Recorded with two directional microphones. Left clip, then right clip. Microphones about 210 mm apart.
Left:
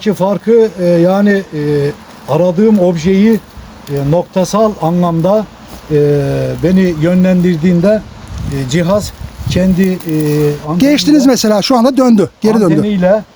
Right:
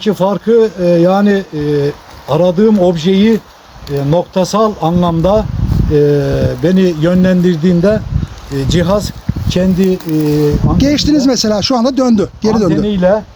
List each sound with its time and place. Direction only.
0.0 s speech: centre (ahead or behind)
10.8 s speech: 15° left (ahead or behind)
12.7 s speech: 10° right (ahead or behind)